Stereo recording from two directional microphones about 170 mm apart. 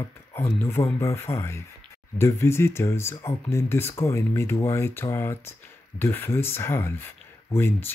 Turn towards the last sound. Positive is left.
turn(degrees=15)  # may be behind; listen again after turning